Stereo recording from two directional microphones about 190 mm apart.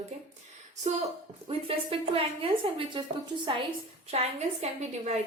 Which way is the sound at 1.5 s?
30° right (ahead or behind).